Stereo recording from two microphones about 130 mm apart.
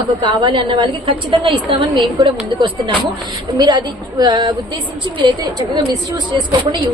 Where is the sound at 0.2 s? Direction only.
35° right (ahead or behind).